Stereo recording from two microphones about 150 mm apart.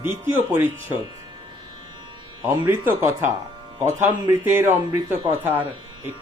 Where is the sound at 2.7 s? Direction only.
15° right (ahead or behind).